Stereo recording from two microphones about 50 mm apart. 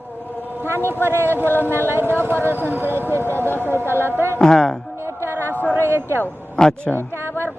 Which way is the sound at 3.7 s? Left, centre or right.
Right.